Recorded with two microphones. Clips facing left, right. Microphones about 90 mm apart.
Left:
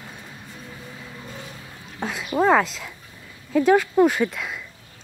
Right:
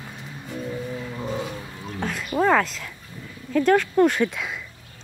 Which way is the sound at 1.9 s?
5° left (ahead or behind).